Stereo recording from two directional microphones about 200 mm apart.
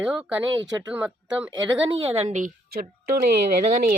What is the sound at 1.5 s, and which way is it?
Speech, 20° right (ahead or behind).